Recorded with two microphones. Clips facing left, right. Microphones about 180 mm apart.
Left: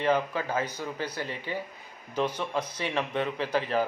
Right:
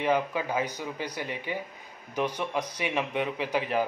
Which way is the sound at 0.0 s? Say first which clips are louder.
Even; 15° right (ahead or behind).